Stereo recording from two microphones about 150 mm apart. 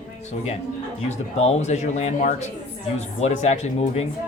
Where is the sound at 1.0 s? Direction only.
45° left (ahead or behind).